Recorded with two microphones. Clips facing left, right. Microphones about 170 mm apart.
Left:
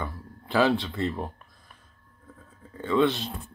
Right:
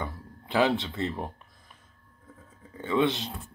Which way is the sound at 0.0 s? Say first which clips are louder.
Left 1 dB; 20° right (ahead or behind).